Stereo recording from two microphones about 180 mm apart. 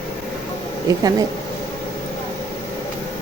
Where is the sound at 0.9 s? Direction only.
20° right (ahead or behind).